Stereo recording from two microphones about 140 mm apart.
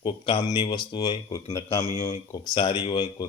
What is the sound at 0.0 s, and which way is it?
Speech, 35° left (ahead or behind).